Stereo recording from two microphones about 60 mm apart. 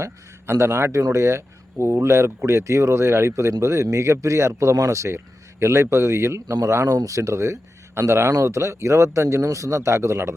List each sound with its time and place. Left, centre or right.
0.0 s a man's voice: right
6.5 s speech: right